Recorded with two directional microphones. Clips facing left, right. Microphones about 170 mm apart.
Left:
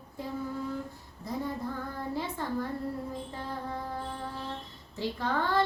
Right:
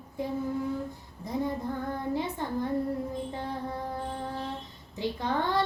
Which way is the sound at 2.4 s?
20° right (ahead or behind).